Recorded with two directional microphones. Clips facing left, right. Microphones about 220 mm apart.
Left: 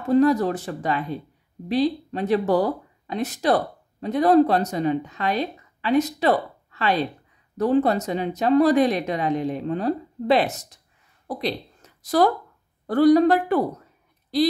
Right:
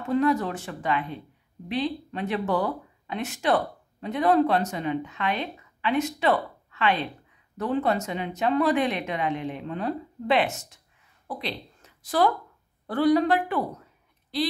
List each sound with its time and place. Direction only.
0.1 s speech: 35° left (ahead or behind)